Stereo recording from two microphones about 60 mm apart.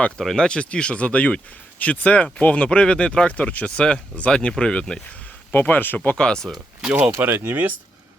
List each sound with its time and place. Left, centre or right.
0.2 s speech: centre
5.5 s speech: left
6.0 s speech: centre
7.2 s speech: right